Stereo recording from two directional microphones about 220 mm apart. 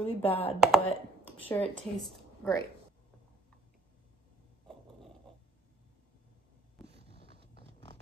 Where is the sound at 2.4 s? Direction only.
10° left (ahead or behind).